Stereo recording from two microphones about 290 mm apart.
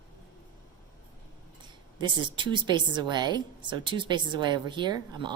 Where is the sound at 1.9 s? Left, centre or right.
Centre.